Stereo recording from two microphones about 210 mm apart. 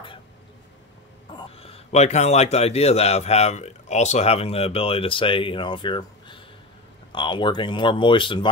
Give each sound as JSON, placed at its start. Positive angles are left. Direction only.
{"t": 1.3, "sound": "a man's voice", "side_deg": 25}